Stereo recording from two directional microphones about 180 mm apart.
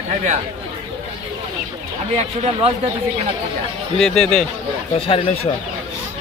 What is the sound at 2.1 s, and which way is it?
Speech, 35° right (ahead or behind).